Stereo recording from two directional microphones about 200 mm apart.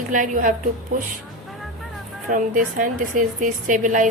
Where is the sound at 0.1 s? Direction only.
40° right (ahead or behind).